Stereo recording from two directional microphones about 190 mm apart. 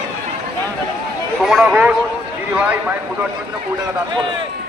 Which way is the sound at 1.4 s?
Centre (ahead or behind).